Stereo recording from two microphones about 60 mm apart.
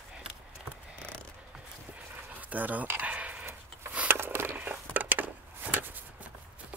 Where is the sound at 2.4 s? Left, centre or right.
Right.